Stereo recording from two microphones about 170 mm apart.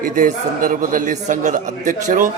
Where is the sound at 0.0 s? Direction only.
50° right (ahead or behind).